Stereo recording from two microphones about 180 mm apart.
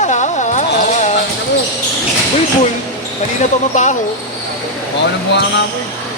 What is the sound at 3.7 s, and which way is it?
Speech, 40° left (ahead or behind).